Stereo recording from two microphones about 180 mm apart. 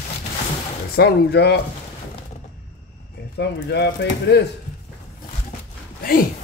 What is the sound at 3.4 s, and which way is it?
Speech, 70° left (ahead or behind).